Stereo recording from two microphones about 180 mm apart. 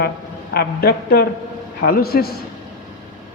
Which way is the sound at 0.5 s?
60° left (ahead or behind).